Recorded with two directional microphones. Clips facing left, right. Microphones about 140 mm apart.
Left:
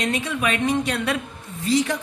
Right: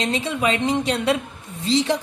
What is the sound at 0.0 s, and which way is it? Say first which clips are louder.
A woman's voice: right 2 dB; 25° right (ahead or behind).